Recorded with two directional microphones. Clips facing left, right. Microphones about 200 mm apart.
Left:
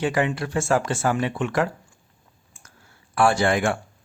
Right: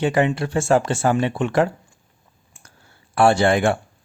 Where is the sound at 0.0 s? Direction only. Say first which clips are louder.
Right 4 dB; 25° right (ahead or behind).